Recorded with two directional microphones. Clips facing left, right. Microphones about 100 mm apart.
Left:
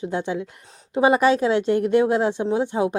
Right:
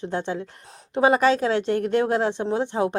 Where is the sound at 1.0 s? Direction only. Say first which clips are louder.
Left 1 dB; 15° left (ahead or behind).